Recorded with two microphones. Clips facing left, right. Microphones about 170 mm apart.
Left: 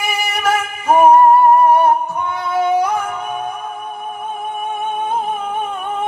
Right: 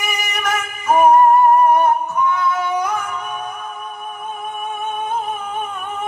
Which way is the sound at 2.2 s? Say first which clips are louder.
Left 1 dB; 30° left (ahead or behind).